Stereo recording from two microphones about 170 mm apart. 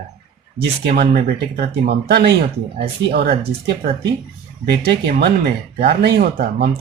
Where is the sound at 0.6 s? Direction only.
70° right (ahead or behind).